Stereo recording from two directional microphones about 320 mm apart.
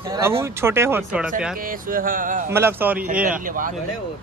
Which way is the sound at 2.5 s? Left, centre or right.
Centre.